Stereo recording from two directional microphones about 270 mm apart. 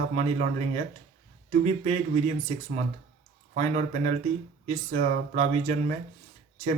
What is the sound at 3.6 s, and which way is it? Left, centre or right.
Speech, right.